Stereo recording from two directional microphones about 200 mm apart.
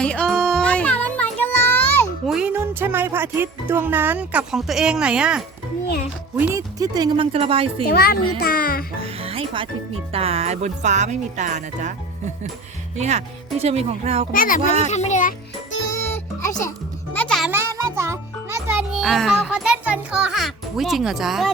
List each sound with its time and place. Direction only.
0.0 s music: 5° left (ahead or behind)
2.2 s music: 5° right (ahead or behind)
6.3 s speech: 10° right (ahead or behind); by 7.9 s 25° right (ahead or behind)
7.9 s speech: 50° left (ahead or behind)
9.0 s speech: 30° right (ahead or behind)
13.0 s speech: 35° right (ahead or behind)
14.3 s a child's voice: 45° left (ahead or behind)
16.0 s music: 10° left (ahead or behind)
17.2 s a child's voice: 5° left (ahead or behind)
17.5 s music: 10° right (ahead or behind)
18.7 s a child's voice: 5° right (ahead or behind)